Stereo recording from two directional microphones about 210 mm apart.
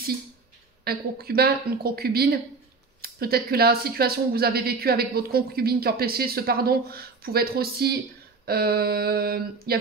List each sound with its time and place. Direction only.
0.8 s speech: 45° right (ahead or behind)